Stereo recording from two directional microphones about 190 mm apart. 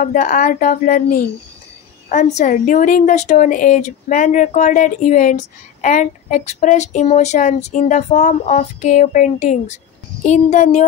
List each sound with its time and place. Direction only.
0.0 s a woman's voice: 45° left (ahead or behind)